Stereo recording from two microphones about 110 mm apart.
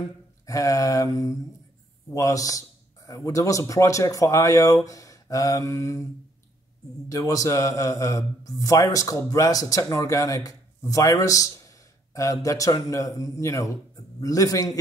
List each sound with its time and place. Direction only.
0.5 s speech: 30° left (ahead or behind)
7.1 s speech: 30° left (ahead or behind)